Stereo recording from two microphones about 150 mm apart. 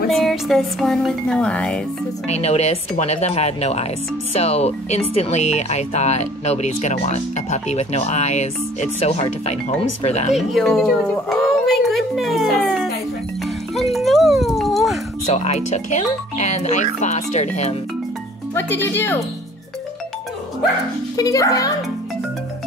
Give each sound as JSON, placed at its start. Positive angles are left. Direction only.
{"t": 0.1, "sound": "music", "side_deg": 0}
{"t": 2.2, "sound": "speech", "side_deg": 45}
{"t": 10.3, "sound": "speech", "side_deg": 0}
{"t": 13.7, "sound": "music", "side_deg": 0}
{"t": 15.2, "sound": "speech", "side_deg": 45}
{"t": 18.5, "sound": "speech", "side_deg": 15}
{"t": 21.2, "sound": "a child's voice", "side_deg": 25}